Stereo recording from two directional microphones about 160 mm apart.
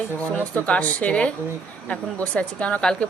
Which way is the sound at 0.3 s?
10° left (ahead or behind).